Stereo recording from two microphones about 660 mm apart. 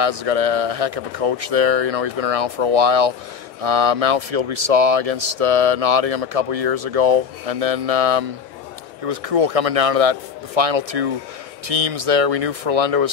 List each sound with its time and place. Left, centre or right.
0.0 s speech: right